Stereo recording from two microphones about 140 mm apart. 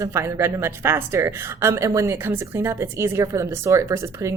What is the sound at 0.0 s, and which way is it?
Speech, 20° right (ahead or behind).